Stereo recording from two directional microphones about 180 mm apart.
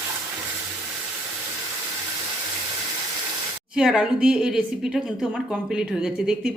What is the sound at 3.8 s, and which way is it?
A woman's voice, 5° right (ahead or behind).